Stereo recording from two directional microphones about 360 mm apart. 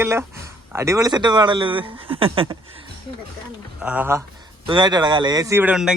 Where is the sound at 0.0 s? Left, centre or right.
Centre.